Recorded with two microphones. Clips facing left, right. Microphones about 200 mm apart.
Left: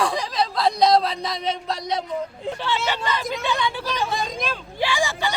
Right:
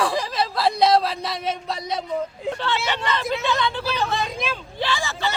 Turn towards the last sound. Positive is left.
turn(degrees=15)  # may be behind; listen again after turning